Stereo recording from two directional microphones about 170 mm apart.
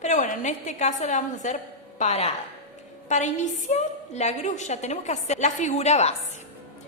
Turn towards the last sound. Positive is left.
turn(degrees=40)  # may be behind; listen again after turning